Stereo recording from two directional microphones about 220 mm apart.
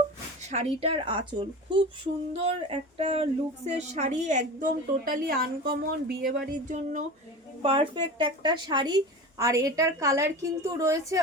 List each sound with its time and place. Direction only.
0.4 s a woman's voice: 30° right (ahead or behind)
7.6 s a woman's voice: 25° right (ahead or behind)